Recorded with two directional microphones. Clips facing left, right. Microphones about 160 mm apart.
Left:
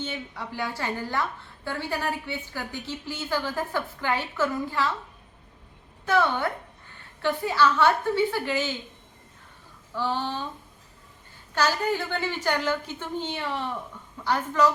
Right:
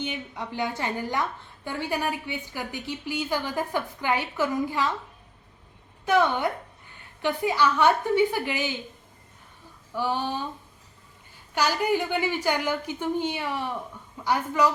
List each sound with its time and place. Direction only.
0.0 s a woman's voice: 15° right (ahead or behind)
6.1 s a woman's voice: 15° right (ahead or behind)
9.9 s a woman's voice: 15° right (ahead or behind)
11.5 s a woman's voice: 15° right (ahead or behind)